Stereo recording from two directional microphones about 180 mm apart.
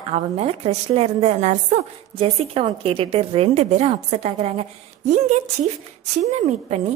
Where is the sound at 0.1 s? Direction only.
35° right (ahead or behind).